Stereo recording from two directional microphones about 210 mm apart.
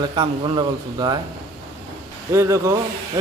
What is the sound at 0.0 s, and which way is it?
Speech, 20° right (ahead or behind).